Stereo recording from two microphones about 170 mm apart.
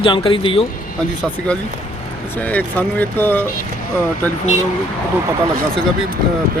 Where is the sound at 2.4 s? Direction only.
10° left (ahead or behind).